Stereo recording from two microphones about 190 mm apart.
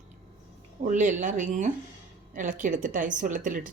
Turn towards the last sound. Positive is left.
turn(degrees=-45)  # may be behind; listen again after turning